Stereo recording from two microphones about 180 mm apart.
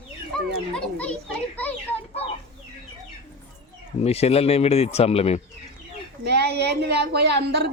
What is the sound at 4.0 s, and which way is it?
Speech, 35° left (ahead or behind).